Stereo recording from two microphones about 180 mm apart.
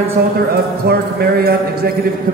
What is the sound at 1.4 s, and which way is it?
Speech, 60° right (ahead or behind).